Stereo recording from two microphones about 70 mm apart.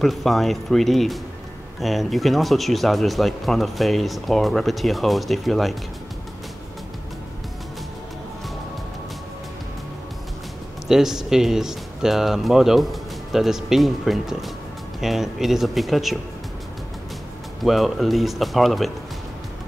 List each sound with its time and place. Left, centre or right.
0.0 s speech: centre
10.9 s speech: centre
17.6 s speech: centre